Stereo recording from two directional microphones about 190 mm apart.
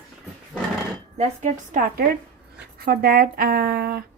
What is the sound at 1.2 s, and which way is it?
Speech, 40° right (ahead or behind).